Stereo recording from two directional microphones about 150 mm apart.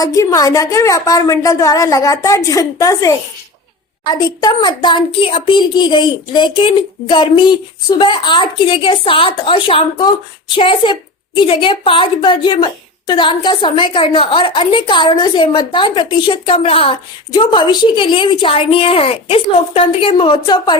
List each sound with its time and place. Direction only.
0.0 s a woman's voice: 25° left (ahead or behind)